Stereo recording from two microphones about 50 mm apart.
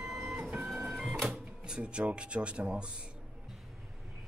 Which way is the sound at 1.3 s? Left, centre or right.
Centre.